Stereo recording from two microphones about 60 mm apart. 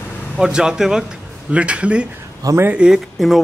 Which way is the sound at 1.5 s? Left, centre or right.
Right.